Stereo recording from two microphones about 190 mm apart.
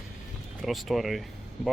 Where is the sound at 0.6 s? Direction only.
Centre (ahead or behind).